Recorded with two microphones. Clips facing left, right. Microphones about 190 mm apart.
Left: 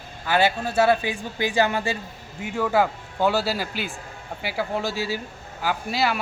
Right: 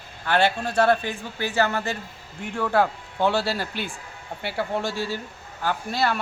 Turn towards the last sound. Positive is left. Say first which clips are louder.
# even
turn(degrees=5)  # may be behind; listen again after turning